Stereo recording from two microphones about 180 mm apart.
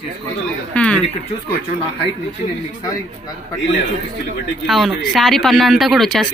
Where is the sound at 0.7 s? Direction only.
5° left (ahead or behind).